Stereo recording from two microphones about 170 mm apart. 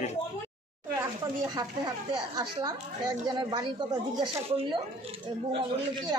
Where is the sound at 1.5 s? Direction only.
25° right (ahead or behind).